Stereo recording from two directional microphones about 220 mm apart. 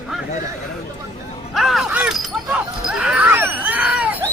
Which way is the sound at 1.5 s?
Centre (ahead or behind).